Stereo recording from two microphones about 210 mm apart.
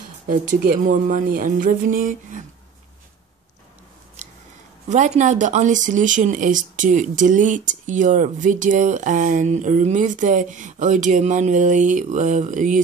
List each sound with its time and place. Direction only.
0.3 s speech: 40° right (ahead or behind)
4.8 s speech: 35° right (ahead or behind)